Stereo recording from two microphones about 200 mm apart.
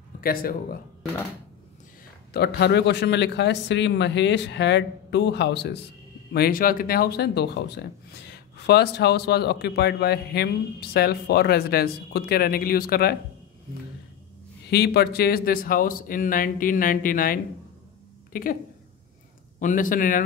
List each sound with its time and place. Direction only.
0.2 s speech: 45° left (ahead or behind)
2.3 s speech: 55° left (ahead or behind)
14.7 s a woman's voice: 55° left (ahead or behind)
19.6 s speech: 40° left (ahead or behind)